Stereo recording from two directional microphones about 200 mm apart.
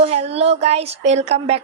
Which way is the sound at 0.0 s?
30° right (ahead or behind).